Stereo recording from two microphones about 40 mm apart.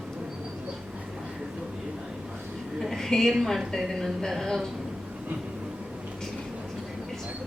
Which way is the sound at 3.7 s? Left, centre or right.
Centre.